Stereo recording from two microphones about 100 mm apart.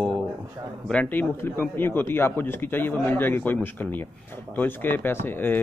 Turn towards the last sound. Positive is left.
turn(degrees=20)  # may be behind; listen again after turning